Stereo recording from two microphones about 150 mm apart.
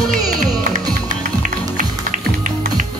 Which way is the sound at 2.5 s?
60° right (ahead or behind).